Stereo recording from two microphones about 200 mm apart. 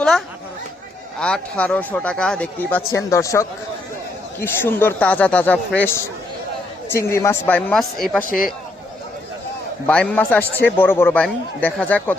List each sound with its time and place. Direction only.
1.2 s speech: 5° left (ahead or behind)
6.9 s speech: 15° left (ahead or behind)
8.2 s speech: 45° left (ahead or behind)
9.8 s speech: 5° left (ahead or behind)